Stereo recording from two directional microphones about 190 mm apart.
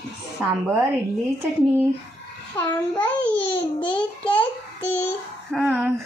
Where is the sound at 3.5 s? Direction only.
30° left (ahead or behind).